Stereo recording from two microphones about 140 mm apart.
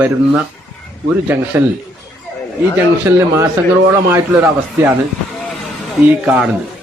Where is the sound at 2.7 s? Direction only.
15° right (ahead or behind).